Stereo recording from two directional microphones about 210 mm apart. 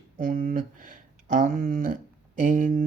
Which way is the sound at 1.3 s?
40° right (ahead or behind).